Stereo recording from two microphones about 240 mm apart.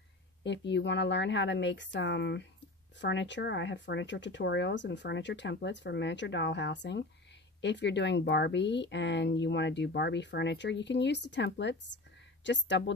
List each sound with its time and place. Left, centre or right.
0.4 s speech: left